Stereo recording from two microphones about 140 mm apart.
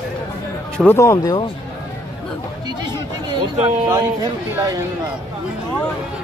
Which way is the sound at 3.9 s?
20° right (ahead or behind).